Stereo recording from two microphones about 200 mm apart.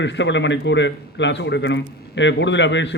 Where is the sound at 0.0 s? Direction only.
65° left (ahead or behind).